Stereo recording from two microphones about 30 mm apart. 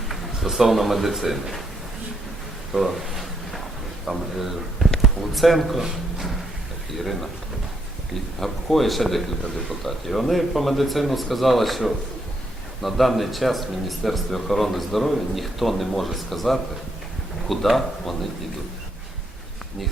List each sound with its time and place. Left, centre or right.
0.1 s speech: centre
2.7 s a sound: centre
4.0 s a man's voice: centre
6.9 s speech: centre
8.4 s speech: centre